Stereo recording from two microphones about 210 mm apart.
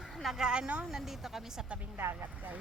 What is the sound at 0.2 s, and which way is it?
Speech, centre (ahead or behind).